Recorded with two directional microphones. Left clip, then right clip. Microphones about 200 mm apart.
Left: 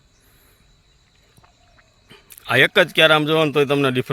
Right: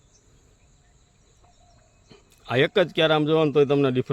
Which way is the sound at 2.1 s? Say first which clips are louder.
Left 7 dB; centre (ahead or behind).